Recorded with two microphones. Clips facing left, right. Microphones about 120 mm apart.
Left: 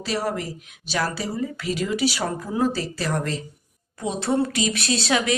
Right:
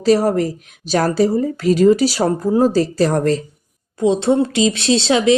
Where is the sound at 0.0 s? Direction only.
40° right (ahead or behind).